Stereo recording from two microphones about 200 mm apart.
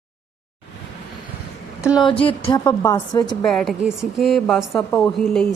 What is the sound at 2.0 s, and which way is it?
A woman's voice, 25° left (ahead or behind).